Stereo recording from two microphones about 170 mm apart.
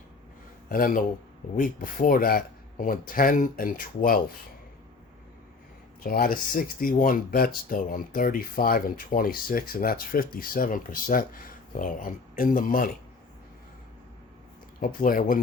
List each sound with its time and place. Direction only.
0.7 s speech: 55° left (ahead or behind)
6.0 s speech: 60° left (ahead or behind)
14.8 s speech: 55° left (ahead or behind)